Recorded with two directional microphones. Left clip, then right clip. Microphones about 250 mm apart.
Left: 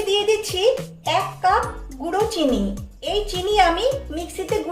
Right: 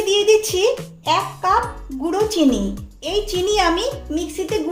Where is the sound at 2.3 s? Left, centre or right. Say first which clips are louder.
Right 3 dB; right.